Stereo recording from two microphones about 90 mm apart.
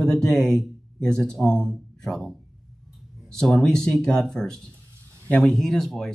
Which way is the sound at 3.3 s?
5° left (ahead or behind).